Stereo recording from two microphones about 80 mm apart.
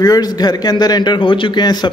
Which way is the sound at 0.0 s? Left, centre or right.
Left.